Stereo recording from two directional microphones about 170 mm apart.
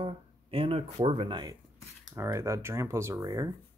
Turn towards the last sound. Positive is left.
turn(degrees=-20)  # may be behind; listen again after turning